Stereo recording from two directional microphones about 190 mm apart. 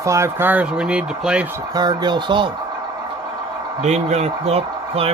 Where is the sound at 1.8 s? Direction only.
20° right (ahead or behind).